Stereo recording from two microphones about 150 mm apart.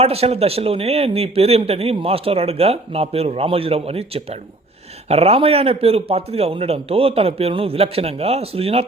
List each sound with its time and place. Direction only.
0.0 s a man's voice: 40° right (ahead or behind)